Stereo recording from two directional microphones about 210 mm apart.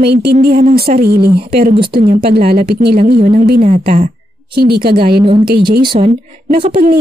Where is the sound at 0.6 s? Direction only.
35° right (ahead or behind).